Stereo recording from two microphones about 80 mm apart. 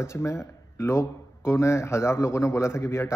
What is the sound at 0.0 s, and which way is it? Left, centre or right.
Speech, left.